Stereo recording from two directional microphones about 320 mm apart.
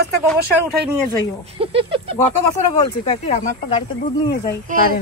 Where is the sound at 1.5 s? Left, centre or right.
Centre.